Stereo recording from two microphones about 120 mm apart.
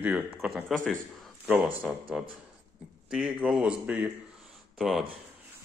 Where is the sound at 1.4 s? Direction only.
10° right (ahead or behind).